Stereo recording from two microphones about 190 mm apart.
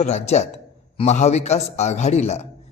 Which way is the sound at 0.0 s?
35° left (ahead or behind).